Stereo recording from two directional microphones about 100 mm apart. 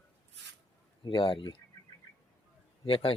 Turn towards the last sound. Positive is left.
turn(degrees=60)  # may be behind; listen again after turning